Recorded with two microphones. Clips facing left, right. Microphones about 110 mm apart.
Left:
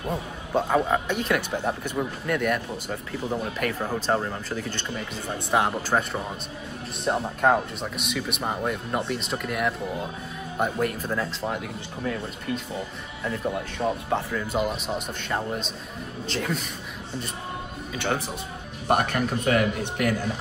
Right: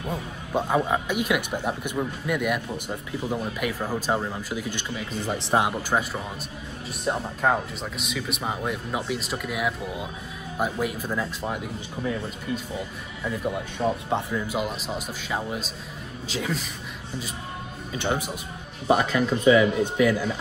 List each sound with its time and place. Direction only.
0.0 s a sound: 5° left (ahead or behind)
0.6 s speech: 10° right (ahead or behind)
5.2 s speech: 85° right
5.8 s speech: 15° right (ahead or behind)
7.1 s speech: centre (ahead or behind)
13.2 s speech: centre (ahead or behind)
14.6 s speech: centre (ahead or behind)
17.9 s speech: 15° right (ahead or behind)
18.9 s a man's voice: 55° left (ahead or behind)